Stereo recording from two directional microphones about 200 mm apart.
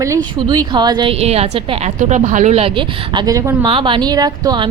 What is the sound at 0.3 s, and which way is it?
A woman's voice, 20° right (ahead or behind).